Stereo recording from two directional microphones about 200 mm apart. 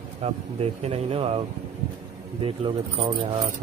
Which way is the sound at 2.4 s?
30° right (ahead or behind).